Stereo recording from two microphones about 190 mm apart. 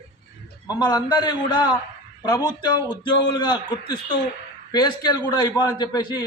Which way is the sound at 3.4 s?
25° left (ahead or behind).